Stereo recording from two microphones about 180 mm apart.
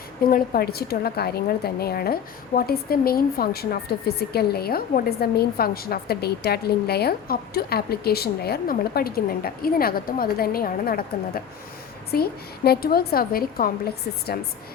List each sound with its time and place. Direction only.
0.3 s a woman's voice: 55° left (ahead or behind)